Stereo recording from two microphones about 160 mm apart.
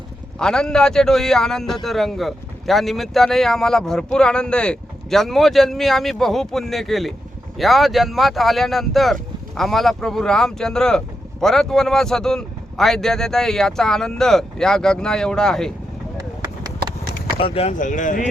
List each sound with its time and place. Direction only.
0.3 s a man's voice: 5° left (ahead or behind)
17.3 s speech: 35° left (ahead or behind)
17.7 s speech: 50° left (ahead or behind)